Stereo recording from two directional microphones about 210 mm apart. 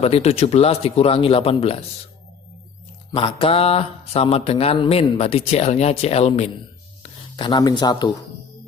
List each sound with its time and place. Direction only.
0.0 s speech: 30° left (ahead or behind)
3.2 s speech: 25° left (ahead or behind)